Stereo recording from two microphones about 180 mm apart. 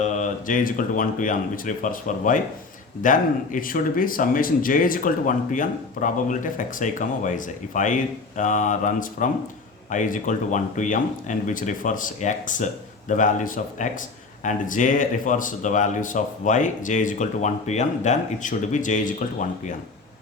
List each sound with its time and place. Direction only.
0.0 s speech: 45° left (ahead or behind)